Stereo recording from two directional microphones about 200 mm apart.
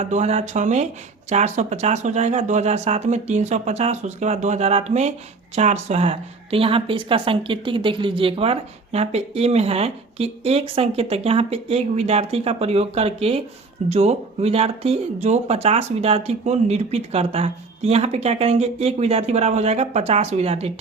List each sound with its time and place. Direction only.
0.0 s a woman's voice: 35° right (ahead or behind)